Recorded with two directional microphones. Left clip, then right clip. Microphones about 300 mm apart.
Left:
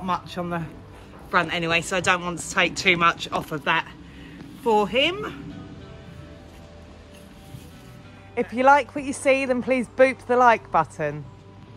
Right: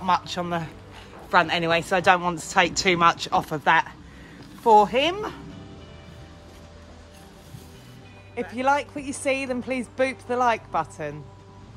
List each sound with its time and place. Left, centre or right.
0.0 s speech: centre
8.4 s speech: centre